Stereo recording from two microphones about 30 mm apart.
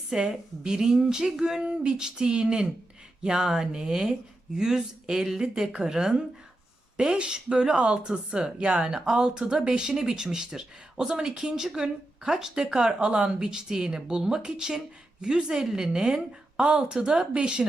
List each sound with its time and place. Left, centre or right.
0.1 s speech: right
1.6 s speech: right
8.8 s speech: right